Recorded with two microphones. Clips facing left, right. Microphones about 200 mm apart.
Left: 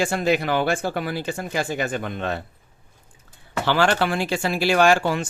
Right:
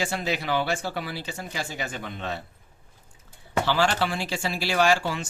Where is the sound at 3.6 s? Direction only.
60° left (ahead or behind).